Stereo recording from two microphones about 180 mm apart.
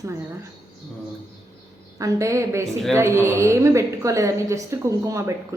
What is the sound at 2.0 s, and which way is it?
A woman's voice, 15° right (ahead or behind).